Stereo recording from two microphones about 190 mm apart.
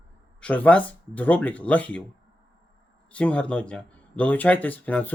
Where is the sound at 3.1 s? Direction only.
5° left (ahead or behind).